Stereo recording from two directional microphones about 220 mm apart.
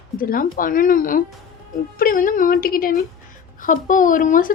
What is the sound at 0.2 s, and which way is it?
A woman's voice, 40° left (ahead or behind).